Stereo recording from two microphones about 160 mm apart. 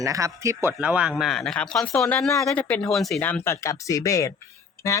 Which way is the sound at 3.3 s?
15° left (ahead or behind).